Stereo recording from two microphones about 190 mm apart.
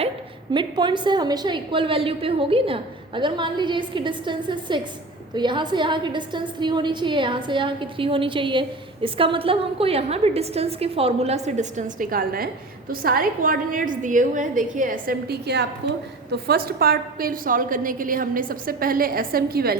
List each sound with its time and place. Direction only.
0.5 s a woman's voice: 25° right (ahead or behind); by 19.7 s 55° right (ahead or behind)